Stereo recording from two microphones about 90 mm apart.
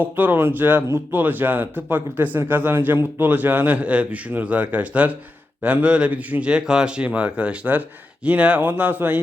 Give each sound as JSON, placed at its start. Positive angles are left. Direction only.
{"t": 0.0, "sound": "a man's voice", "side_deg": -20}